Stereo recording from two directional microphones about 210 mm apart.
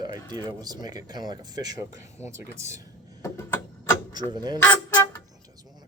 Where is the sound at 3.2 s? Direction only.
10° left (ahead or behind).